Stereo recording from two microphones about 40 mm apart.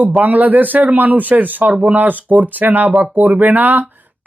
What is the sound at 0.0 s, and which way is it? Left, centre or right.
Speech, right.